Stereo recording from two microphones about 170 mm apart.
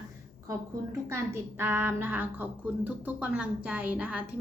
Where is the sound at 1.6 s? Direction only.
10° right (ahead or behind).